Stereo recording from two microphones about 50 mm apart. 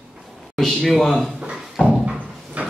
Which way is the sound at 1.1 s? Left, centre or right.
Centre.